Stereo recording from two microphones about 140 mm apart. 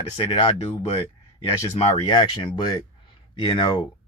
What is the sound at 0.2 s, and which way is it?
Speech, 35° left (ahead or behind).